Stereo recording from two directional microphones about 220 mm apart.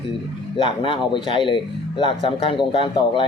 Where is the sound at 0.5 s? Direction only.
20° left (ahead or behind).